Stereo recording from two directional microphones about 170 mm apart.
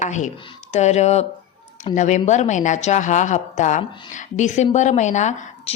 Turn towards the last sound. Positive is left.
turn(degrees=45)  # may be behind; listen again after turning